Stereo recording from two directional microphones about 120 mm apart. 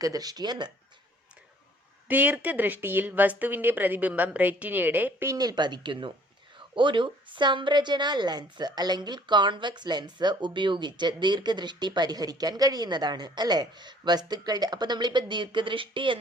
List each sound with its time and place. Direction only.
0.0 s a woman's voice: 30° right (ahead or behind)
2.0 s speech: 15° right (ahead or behind)
5.3 s a woman's voice: 30° right (ahead or behind)